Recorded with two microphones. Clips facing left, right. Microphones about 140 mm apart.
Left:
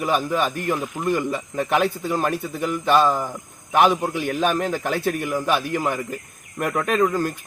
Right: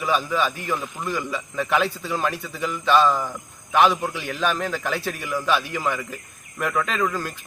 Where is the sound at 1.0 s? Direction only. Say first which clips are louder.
Left 6 dB; 50° left (ahead or behind).